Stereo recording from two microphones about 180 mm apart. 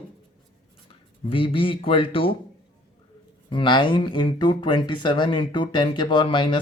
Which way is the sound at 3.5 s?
25° left (ahead or behind).